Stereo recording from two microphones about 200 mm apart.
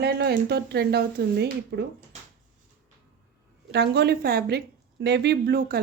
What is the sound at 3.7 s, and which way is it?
A woman's voice, 55° right (ahead or behind).